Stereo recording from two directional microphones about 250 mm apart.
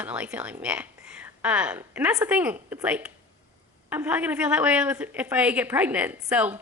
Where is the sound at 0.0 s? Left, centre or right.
Centre.